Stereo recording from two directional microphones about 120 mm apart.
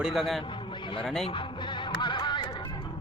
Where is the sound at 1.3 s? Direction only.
45° left (ahead or behind).